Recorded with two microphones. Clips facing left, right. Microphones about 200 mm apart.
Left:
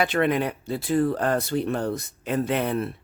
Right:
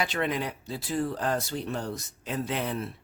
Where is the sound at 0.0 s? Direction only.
60° left (ahead or behind).